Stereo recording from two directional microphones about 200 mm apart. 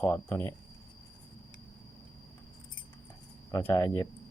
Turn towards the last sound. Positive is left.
turn(degrees=20)  # may be behind; listen again after turning